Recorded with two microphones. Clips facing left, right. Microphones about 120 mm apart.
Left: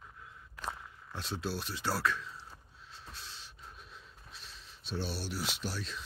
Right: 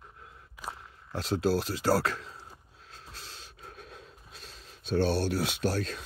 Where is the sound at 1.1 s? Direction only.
90° right.